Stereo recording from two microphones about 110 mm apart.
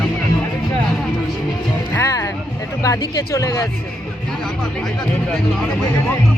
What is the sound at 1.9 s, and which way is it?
Music, 25° left (ahead or behind).